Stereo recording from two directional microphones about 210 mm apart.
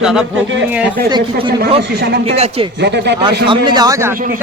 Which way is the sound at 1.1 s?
20° right (ahead or behind).